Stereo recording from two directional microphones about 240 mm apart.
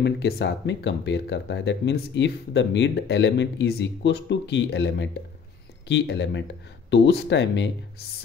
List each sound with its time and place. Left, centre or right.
0.0 s speech: left